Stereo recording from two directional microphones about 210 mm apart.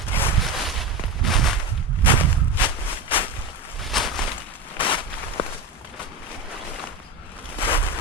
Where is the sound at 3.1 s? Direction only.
25° left (ahead or behind).